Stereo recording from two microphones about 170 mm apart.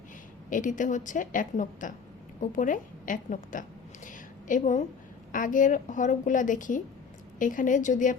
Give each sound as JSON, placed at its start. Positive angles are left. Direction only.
{"t": 0.5, "sound": "a woman's voice", "side_deg": 50}
{"t": 4.0, "sound": "a sound", "side_deg": 50}
{"t": 5.3, "sound": "a woman's voice", "side_deg": 50}